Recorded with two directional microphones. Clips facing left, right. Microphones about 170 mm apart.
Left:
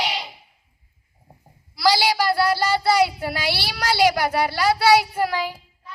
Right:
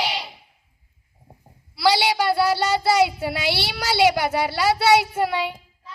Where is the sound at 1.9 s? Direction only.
25° right (ahead or behind).